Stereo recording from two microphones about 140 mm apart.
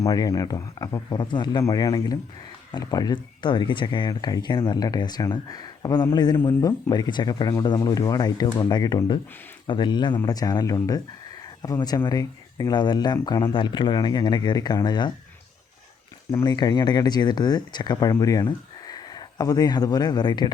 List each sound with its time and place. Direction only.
0.0 s speech: 25° left (ahead or behind)
6.3 s speech: 15° left (ahead or behind)
16.4 s speech: 30° left (ahead or behind)